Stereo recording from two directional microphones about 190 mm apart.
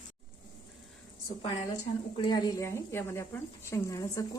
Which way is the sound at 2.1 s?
25° left (ahead or behind).